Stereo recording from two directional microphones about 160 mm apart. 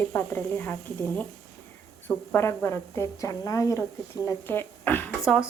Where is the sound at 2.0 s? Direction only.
15° left (ahead or behind).